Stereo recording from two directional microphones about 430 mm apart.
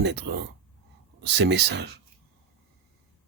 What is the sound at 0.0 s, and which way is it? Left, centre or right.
Speech, right.